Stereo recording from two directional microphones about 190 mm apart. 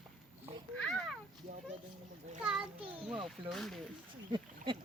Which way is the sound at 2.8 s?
30° right (ahead or behind).